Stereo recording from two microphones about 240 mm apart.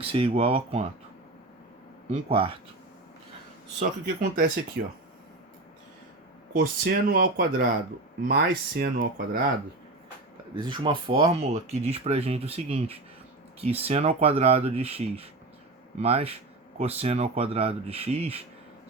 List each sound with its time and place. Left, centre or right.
0.0 s speech: right
2.0 s speech: right
3.8 s speech: right
4.8 s speech: right
6.5 s speech: right
10.5 s speech: centre